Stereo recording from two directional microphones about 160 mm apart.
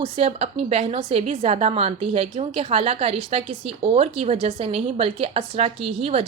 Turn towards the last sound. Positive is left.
turn(degrees=-40)  # may be behind; listen again after turning